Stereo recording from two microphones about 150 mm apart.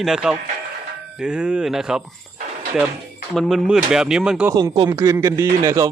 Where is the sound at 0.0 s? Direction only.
5° right (ahead or behind).